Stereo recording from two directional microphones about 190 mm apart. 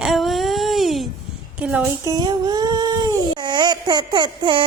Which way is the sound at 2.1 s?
20° right (ahead or behind).